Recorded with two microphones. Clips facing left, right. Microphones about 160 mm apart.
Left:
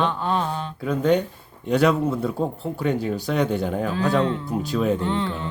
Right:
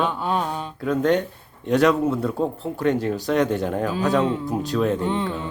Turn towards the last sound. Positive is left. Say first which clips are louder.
# right 1 dB
turn(degrees=-15)  # may be behind; listen again after turning